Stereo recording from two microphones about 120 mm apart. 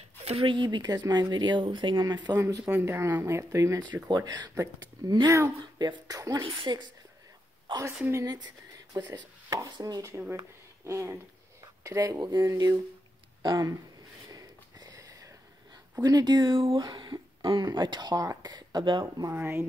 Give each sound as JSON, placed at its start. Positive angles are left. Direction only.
{"t": 0.2, "sound": "a sound", "side_deg": -60}
{"t": 0.5, "sound": "speech", "side_deg": -40}
{"t": 2.8, "sound": "speech", "side_deg": -20}
{"t": 6.4, "sound": "speech", "side_deg": -40}
{"t": 8.1, "sound": "speech", "side_deg": -30}
{"t": 10.9, "sound": "speech", "side_deg": -25}
{"t": 14.3, "sound": "a sound", "side_deg": -30}
{"t": 16.0, "sound": "speech", "side_deg": -35}
{"t": 19.3, "sound": "speech", "side_deg": -20}